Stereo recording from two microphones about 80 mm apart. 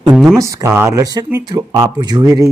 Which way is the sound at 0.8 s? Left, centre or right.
Right.